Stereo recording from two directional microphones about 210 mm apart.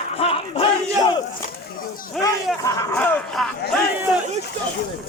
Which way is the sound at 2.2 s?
Centre (ahead or behind).